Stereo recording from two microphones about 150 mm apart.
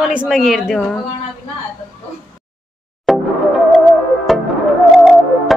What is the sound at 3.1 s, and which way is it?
Music, centre (ahead or behind).